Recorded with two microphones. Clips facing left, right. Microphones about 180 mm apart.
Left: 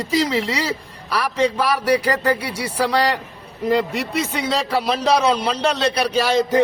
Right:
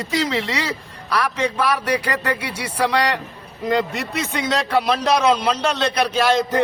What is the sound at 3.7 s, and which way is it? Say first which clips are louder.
Speech: left 2 dB; 10° left (ahead or behind).